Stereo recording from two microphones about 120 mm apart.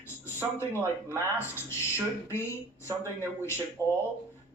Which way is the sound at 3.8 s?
20° left (ahead or behind).